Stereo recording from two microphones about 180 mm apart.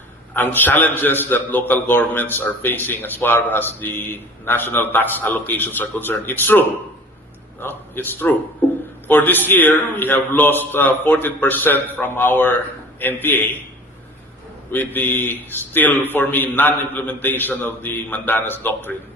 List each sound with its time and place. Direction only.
0.3 s a man's voice: 10° left (ahead or behind)
14.7 s a man's voice: 10° left (ahead or behind)